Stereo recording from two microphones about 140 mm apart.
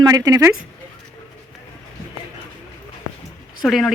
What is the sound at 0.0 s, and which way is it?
Speech, 25° right (ahead or behind).